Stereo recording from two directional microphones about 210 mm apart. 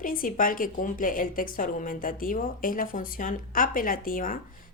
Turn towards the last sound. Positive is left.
turn(degrees=40)  # may be behind; listen again after turning